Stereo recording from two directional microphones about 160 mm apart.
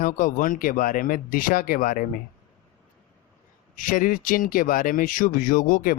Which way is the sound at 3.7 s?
55° left (ahead or behind).